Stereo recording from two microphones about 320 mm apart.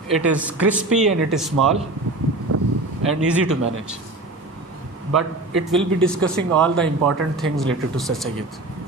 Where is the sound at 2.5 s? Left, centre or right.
Right.